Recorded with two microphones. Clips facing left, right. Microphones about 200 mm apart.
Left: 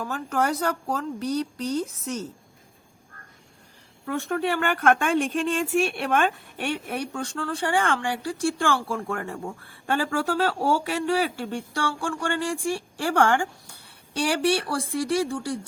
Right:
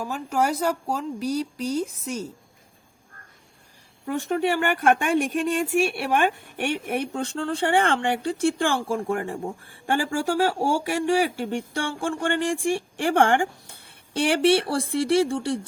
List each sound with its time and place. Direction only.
0.0 s speech: 10° right (ahead or behind)
4.0 s speech: 15° right (ahead or behind)